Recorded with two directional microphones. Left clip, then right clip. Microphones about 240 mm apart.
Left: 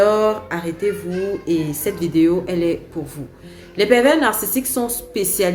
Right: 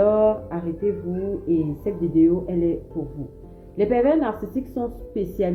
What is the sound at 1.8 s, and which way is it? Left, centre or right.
Speech, centre.